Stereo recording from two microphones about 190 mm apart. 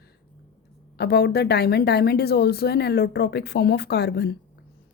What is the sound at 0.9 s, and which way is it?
Speech, 55° left (ahead or behind).